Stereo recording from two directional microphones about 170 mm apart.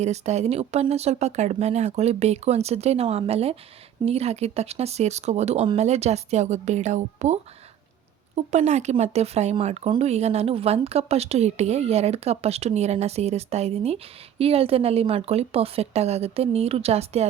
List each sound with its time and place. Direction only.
0.0 s speech: 40° right (ahead or behind)
8.4 s speech: 45° right (ahead or behind)